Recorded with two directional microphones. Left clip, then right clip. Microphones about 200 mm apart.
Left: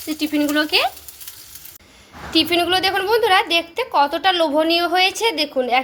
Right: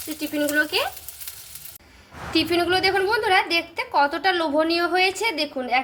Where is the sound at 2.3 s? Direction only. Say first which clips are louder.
Left 4 dB; 25° left (ahead or behind).